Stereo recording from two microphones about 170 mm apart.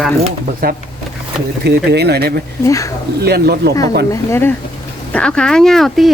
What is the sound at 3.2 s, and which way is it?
Speech, 70° right (ahead or behind).